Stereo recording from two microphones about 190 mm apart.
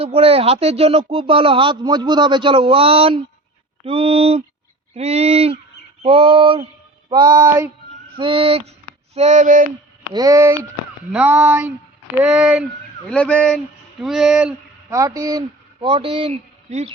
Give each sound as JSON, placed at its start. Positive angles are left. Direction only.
{"t": 0.0, "sound": "a man's voice", "side_deg": -30}
{"t": 10.1, "sound": "speech", "side_deg": -20}
{"t": 13.1, "sound": "speech", "side_deg": 5}
{"t": 14.8, "sound": "speech", "side_deg": -15}